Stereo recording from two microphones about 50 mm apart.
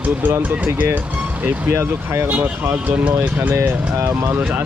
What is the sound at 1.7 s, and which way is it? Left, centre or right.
Speech, right.